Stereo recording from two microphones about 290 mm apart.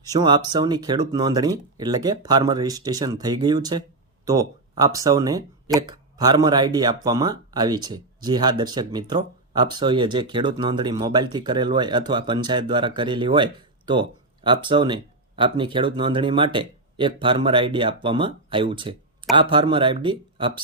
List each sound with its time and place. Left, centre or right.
0.1 s speech: centre